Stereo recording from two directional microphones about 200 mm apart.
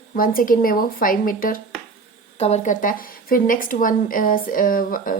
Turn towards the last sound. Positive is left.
turn(degrees=45)  # may be behind; listen again after turning